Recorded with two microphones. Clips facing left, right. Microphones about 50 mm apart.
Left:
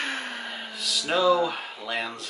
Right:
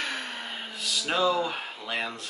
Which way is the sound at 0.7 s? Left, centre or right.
Centre.